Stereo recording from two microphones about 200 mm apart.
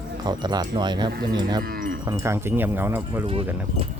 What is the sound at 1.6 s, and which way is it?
Livestock, 45° right (ahead or behind).